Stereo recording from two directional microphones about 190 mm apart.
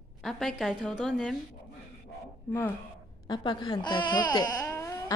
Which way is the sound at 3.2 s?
20° left (ahead or behind).